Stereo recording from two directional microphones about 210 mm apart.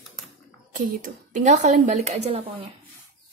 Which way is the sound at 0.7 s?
35° right (ahead or behind).